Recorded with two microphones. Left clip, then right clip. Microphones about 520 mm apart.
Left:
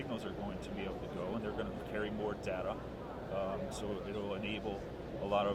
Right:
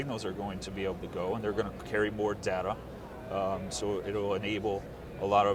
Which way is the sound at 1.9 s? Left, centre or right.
Right.